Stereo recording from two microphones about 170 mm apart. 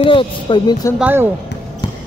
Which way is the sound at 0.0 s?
30° left (ahead or behind).